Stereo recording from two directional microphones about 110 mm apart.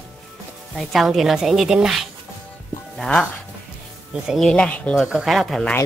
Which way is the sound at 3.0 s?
10° left (ahead or behind).